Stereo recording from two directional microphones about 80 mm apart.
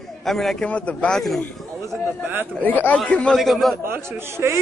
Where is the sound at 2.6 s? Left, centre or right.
Left.